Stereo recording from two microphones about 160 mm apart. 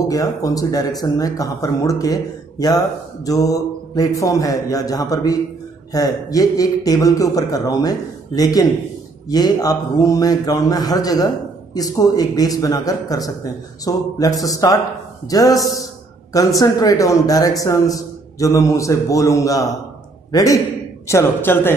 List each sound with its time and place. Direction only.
0.1 s a man's voice: 20° left (ahead or behind)
3.3 s mantra: 20° left (ahead or behind)
4.2 s a man's voice: 20° left (ahead or behind)